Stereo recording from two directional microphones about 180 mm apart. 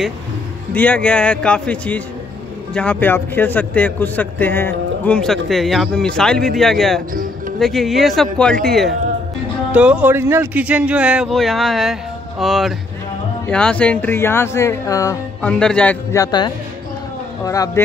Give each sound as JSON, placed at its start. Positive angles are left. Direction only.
{"t": 0.7, "sound": "a man's voice", "side_deg": 5}
{"t": 15.4, "sound": "speech", "side_deg": 5}